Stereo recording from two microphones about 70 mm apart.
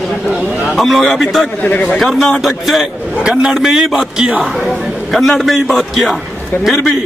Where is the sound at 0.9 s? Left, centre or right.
Centre.